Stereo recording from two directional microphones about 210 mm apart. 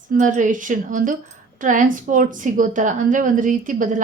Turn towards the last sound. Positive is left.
turn(degrees=-40)  # may be behind; listen again after turning